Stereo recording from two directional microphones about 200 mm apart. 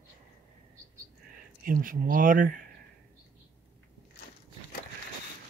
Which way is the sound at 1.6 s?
45° right (ahead or behind).